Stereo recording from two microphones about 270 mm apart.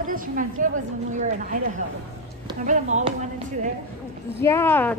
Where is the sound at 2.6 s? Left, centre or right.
Right.